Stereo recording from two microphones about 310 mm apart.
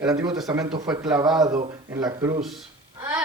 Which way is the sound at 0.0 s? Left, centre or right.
Centre.